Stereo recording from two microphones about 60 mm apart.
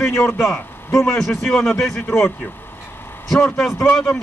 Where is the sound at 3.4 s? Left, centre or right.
Centre.